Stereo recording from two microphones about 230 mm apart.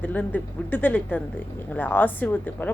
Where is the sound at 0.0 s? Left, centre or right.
Centre.